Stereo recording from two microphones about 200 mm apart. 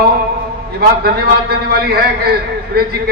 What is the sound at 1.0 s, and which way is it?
A man's voice, 50° right (ahead or behind).